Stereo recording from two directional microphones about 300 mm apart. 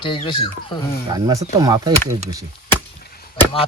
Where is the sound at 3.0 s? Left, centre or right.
Left.